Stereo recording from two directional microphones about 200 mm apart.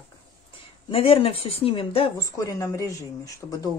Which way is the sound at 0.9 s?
30° left (ahead or behind).